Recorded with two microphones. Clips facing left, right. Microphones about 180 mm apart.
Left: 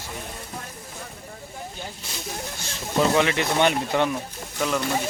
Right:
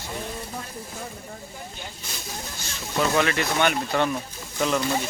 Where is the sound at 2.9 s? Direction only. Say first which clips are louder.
Left 2 dB; 15° left (ahead or behind).